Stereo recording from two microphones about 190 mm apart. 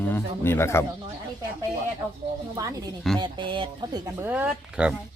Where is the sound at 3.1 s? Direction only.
25° right (ahead or behind).